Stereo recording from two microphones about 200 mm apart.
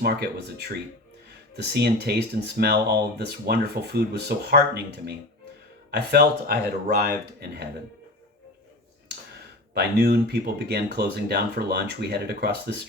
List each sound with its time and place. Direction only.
0.0 s speech: 55° right (ahead or behind)
9.7 s speech: 55° right (ahead or behind)